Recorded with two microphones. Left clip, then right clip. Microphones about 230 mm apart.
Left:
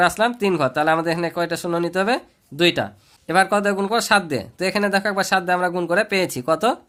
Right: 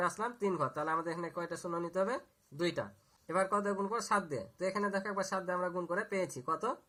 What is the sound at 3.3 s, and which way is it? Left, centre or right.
Speech, left.